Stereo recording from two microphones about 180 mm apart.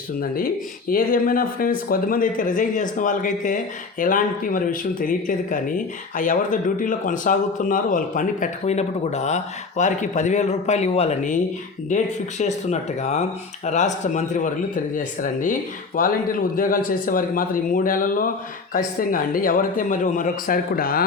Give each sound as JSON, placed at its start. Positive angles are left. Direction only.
{"t": 0.2, "sound": "speech", "side_deg": 50}